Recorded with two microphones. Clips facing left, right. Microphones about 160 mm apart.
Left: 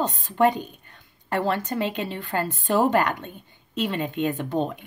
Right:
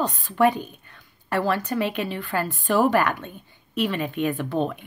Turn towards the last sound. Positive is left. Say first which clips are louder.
# right 1 dB
turn(degrees=20)  # may be behind; listen again after turning